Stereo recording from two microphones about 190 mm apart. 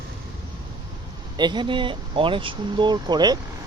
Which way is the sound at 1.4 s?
25° right (ahead or behind).